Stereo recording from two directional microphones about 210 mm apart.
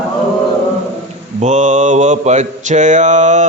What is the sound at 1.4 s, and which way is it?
Mantra, 35° right (ahead or behind).